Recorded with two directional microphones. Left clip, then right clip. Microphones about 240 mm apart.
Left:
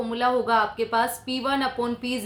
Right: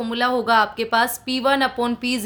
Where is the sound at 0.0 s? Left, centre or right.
Right.